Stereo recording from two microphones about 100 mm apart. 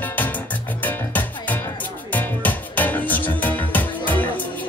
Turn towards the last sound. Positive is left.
turn(degrees=15)  # may be behind; listen again after turning